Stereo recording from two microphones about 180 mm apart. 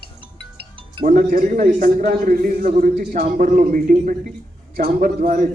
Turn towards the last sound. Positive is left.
turn(degrees=-50)  # may be behind; listen again after turning